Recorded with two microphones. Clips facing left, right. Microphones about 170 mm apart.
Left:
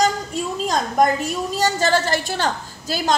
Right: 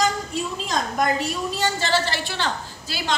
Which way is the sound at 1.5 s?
45° left (ahead or behind).